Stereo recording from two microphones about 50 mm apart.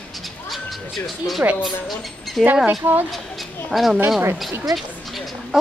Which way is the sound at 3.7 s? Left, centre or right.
Centre.